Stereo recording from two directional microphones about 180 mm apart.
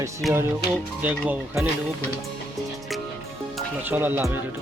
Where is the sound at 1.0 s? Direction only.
10° right (ahead or behind).